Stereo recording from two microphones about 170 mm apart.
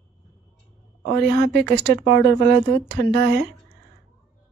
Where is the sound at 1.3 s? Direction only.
80° right.